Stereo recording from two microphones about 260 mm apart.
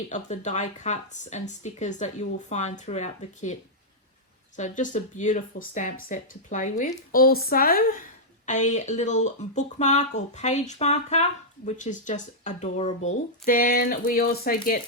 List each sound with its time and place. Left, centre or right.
0.1 s speech: left